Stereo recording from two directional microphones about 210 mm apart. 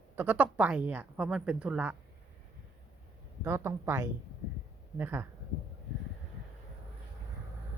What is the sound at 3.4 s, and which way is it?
Speech, 10° right (ahead or behind).